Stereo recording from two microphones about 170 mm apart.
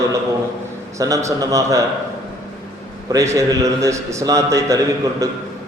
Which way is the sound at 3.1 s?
20° right (ahead or behind).